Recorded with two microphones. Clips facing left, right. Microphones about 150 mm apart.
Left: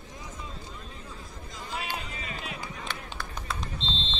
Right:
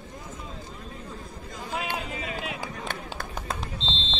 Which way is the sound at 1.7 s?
60° right (ahead or behind).